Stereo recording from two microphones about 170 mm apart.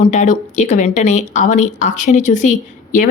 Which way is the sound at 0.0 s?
45° left (ahead or behind).